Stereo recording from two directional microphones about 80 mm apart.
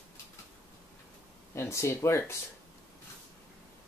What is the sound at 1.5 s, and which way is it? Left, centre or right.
Speech, left.